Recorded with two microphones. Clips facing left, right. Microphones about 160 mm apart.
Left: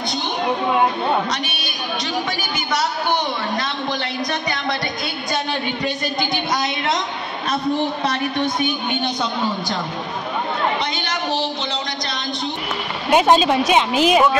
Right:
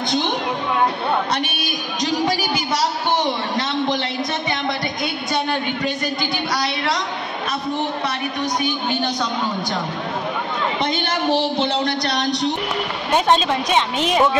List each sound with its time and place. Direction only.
1.3 s a woman's voice: 55° right (ahead or behind)
2.2 s a sound: 35° right (ahead or behind)
6.3 s a woman's voice: 20° left (ahead or behind)
8.4 s a woman's voice: 25° left (ahead or behind)
11.6 s speech: 60° right (ahead or behind); by 12.5 s 80° right
13.1 s a woman's voice: 5° left (ahead or behind)